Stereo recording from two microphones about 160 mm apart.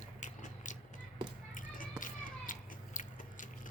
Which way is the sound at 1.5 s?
60° left (ahead or behind).